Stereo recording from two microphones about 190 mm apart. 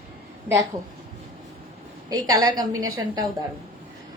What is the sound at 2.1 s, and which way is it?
A woman's voice, 20° right (ahead or behind).